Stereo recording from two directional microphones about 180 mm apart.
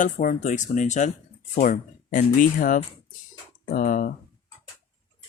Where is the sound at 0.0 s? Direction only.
45° left (ahead or behind).